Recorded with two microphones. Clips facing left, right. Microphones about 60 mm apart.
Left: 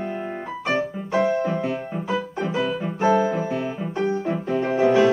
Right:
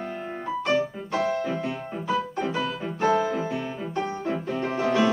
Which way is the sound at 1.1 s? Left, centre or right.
Left.